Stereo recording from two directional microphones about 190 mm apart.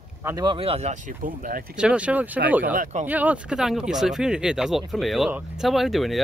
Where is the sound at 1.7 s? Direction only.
5° right (ahead or behind).